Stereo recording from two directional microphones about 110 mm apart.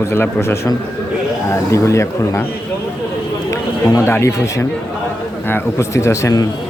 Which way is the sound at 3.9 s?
25° left (ahead or behind).